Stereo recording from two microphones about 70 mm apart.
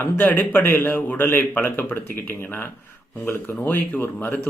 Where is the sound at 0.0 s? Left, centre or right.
Left.